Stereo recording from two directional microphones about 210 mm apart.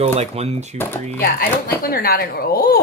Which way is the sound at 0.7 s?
10° left (ahead or behind).